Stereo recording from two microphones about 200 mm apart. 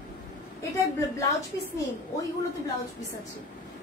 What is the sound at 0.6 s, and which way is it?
Speech, 15° left (ahead or behind).